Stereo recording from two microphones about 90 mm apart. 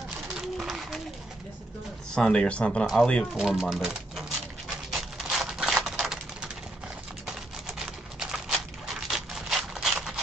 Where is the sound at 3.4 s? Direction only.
5° right (ahead or behind).